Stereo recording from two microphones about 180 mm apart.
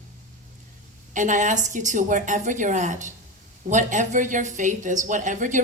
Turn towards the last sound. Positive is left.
turn(degrees=-45)  # may be behind; listen again after turning